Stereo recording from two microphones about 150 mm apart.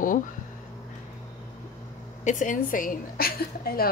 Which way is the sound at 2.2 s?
55° left (ahead or behind).